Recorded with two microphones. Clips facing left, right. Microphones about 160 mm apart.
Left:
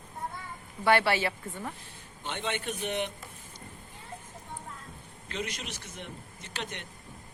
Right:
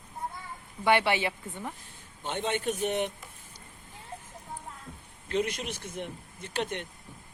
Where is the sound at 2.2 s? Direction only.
45° right (ahead or behind).